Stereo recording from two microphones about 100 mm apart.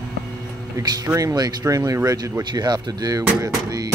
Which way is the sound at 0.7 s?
35° right (ahead or behind).